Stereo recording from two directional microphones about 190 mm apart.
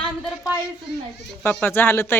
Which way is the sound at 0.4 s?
15° left (ahead or behind).